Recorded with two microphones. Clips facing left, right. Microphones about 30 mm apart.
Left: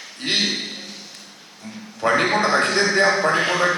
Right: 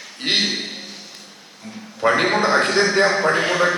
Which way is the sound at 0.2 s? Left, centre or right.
Centre.